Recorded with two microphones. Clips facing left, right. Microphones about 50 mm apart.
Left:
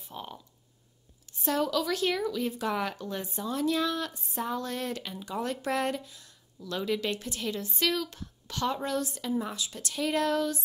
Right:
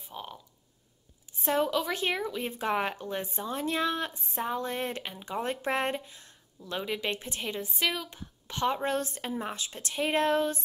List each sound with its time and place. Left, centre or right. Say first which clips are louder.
0.1 s speech: even; centre
1.4 s speech: right 1 dB; right
7.6 s a woman's voice: left 2 dB; centre; by 10.6 s right